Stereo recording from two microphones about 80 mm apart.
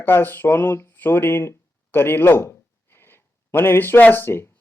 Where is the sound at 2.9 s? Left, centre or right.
Left.